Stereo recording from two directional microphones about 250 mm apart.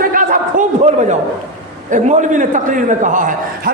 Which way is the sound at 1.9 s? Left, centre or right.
Right.